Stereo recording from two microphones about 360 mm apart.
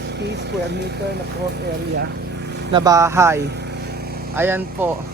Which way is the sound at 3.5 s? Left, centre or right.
Right.